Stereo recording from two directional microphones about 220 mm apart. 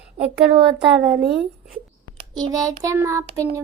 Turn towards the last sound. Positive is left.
turn(degrees=-15)  # may be behind; listen again after turning